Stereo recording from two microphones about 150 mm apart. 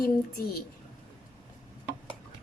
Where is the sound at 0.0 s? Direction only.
90° left.